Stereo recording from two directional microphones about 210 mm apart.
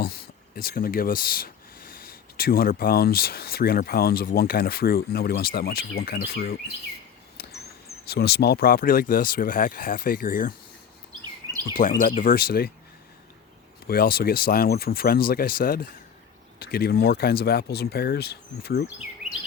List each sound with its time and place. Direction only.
0.0 s speech: 45° left (ahead or behind)
7.4 s a sound: 45° left (ahead or behind)
8.0 s speech: 50° left (ahead or behind)
11.8 s speech: 40° left (ahead or behind)
13.8 s speech: 45° left (ahead or behind)